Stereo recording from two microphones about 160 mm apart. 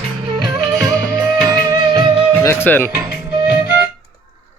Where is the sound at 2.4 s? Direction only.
15° left (ahead or behind).